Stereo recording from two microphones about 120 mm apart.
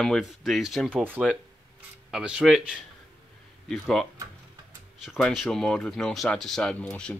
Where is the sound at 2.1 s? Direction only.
5° right (ahead or behind).